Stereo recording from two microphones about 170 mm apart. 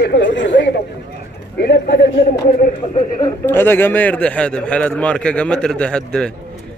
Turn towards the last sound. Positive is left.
turn(degrees=5)  # may be behind; listen again after turning